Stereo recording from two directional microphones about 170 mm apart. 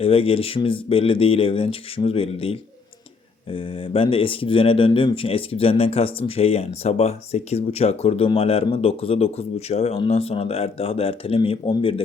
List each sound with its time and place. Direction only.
0.0 s speech: 35° left (ahead or behind)